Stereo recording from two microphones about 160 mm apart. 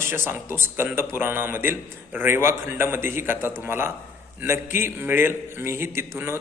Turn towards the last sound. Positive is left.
turn(degrees=-15)  # may be behind; listen again after turning